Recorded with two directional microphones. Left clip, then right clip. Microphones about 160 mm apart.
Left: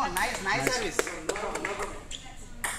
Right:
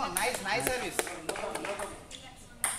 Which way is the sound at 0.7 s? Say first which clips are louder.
Left 4 dB; 50° right (ahead or behind).